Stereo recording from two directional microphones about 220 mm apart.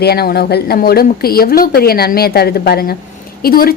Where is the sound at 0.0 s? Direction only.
45° left (ahead or behind).